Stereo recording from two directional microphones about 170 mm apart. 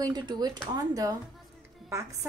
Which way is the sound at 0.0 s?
25° right (ahead or behind).